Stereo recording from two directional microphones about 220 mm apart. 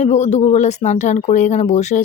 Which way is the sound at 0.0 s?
30° left (ahead or behind).